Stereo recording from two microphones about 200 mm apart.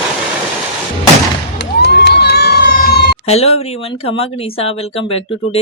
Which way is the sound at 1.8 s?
50° left (ahead or behind).